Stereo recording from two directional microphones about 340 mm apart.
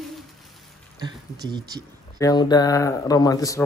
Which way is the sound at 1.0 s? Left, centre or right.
Centre.